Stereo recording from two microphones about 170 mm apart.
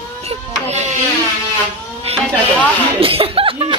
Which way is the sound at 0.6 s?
40° right (ahead or behind).